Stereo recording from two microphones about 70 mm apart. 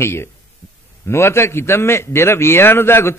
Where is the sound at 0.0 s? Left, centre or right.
Left.